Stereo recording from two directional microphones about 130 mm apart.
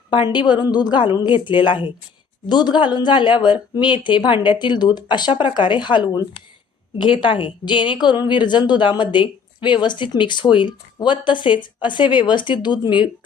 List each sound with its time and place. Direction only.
0.1 s a woman's voice: 35° left (ahead or behind)